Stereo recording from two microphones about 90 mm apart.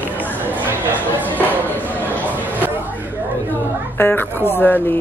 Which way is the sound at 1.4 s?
20° left (ahead or behind).